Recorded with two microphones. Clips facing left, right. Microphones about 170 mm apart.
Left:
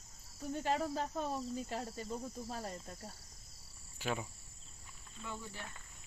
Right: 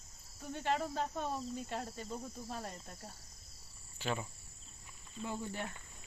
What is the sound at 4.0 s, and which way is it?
Speech, 10° left (ahead or behind).